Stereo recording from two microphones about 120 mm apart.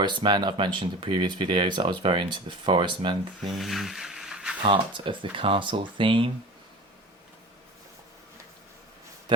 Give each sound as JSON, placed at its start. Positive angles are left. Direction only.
{"t": 0.0, "sound": "speech", "side_deg": -40}
{"t": 3.4, "sound": "a sound", "side_deg": 0}
{"t": 4.6, "sound": "speech", "side_deg": -45}